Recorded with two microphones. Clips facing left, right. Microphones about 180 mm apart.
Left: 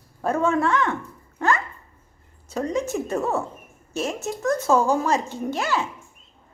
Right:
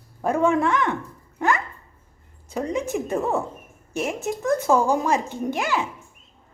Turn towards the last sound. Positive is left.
turn(degrees=-15)  # may be behind; listen again after turning